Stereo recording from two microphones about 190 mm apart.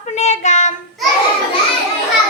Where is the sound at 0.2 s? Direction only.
35° left (ahead or behind).